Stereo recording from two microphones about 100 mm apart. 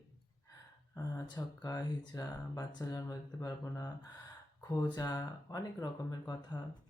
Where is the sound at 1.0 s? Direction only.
35° left (ahead or behind).